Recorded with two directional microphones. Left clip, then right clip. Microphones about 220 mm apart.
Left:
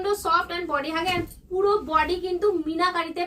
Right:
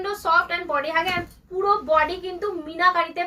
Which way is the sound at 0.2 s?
20° left (ahead or behind).